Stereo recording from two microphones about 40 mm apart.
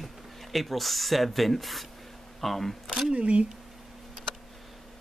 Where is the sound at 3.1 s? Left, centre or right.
Right.